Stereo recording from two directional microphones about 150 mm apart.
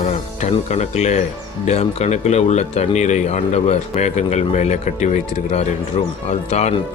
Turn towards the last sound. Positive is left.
turn(degrees=45)  # may be behind; listen again after turning